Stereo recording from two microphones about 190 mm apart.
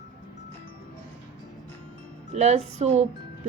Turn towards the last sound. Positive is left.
turn(degrees=-35)  # may be behind; listen again after turning